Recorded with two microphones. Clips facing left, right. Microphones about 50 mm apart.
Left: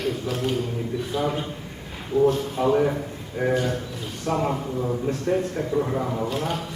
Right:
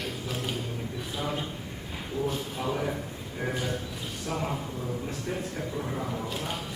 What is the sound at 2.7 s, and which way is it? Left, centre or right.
Speech, centre.